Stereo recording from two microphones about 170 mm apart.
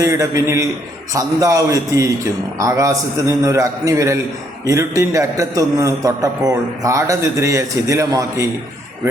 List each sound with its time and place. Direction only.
0.0 s a man's voice: 20° right (ahead or behind)